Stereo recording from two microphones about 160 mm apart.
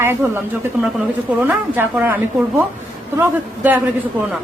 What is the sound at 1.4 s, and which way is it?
A woman's voice, 15° right (ahead or behind).